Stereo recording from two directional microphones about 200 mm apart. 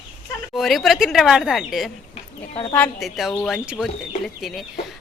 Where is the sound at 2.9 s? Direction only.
Centre (ahead or behind).